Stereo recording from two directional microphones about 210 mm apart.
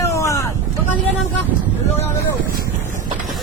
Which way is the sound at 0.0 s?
15° left (ahead or behind).